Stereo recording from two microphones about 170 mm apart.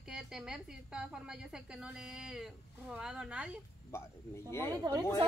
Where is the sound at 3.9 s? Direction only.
15° left (ahead or behind).